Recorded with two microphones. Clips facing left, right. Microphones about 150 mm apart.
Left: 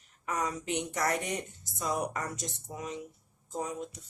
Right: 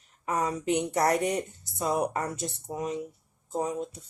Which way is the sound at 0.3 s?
30° right (ahead or behind).